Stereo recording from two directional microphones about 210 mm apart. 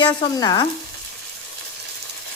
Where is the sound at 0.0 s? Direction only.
20° left (ahead or behind).